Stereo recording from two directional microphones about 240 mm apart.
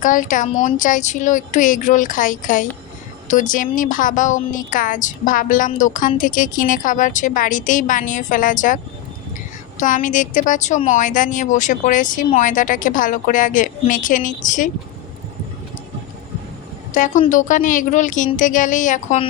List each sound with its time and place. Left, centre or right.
0.0 s a woman's voice: left
9.8 s a woman's voice: left
16.9 s a woman's voice: left